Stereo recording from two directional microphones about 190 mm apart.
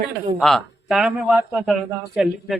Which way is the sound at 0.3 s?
Centre (ahead or behind).